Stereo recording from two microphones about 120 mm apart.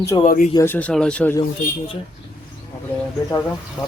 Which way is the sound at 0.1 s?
35° left (ahead or behind).